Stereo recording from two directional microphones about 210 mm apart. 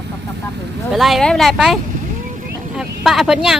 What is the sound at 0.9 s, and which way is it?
Speech, centre (ahead or behind).